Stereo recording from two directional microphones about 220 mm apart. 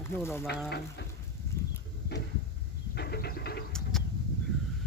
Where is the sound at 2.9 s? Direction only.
45° left (ahead or behind).